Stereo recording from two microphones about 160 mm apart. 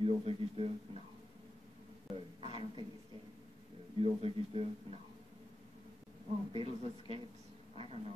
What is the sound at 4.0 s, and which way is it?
Speech, 40° right (ahead or behind).